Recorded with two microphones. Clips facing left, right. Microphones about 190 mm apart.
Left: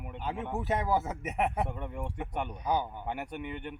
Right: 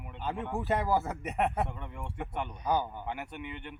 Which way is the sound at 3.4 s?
45° left (ahead or behind).